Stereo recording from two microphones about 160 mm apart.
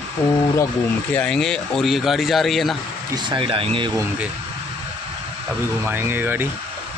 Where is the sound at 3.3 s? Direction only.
35° right (ahead or behind).